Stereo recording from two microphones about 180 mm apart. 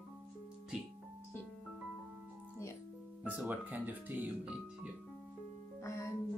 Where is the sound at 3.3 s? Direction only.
10° right (ahead or behind).